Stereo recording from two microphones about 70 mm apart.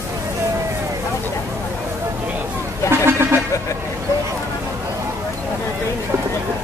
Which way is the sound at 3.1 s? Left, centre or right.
Right.